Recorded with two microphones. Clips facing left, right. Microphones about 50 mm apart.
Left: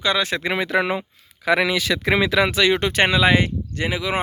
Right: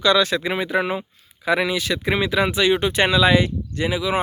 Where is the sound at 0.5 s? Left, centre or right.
Left.